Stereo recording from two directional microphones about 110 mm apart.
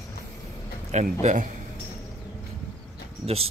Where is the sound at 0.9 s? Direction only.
90° right.